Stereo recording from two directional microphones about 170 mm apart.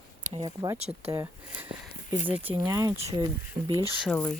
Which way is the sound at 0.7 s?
40° right (ahead or behind).